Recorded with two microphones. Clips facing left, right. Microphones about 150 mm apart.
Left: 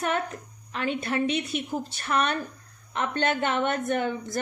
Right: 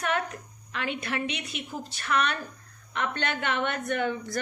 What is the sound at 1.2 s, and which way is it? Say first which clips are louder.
Speech: left 7 dB; 50° left (ahead or behind).